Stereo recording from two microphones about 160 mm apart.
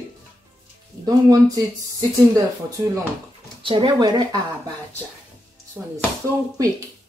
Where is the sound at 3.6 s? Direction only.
30° right (ahead or behind).